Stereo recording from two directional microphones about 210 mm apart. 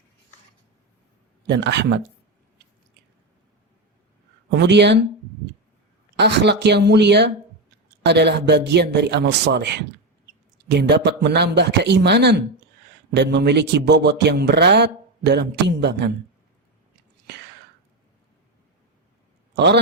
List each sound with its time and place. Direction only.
1.5 s speech: 55° right (ahead or behind)
4.5 s speech: 55° right (ahead or behind)
6.1 s speech: 50° right (ahead or behind)
19.5 s speech: 55° right (ahead or behind)